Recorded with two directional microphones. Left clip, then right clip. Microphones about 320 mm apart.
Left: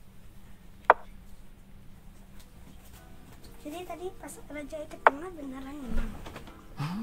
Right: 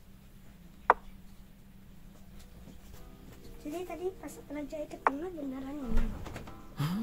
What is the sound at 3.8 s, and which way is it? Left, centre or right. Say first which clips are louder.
A woman's voice: right 1 dB; left.